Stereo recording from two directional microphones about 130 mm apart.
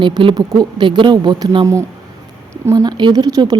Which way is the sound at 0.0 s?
40° right (ahead or behind).